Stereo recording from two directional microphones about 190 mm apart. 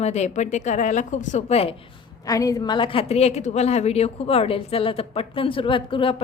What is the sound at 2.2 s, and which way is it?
A woman's voice, 20° left (ahead or behind).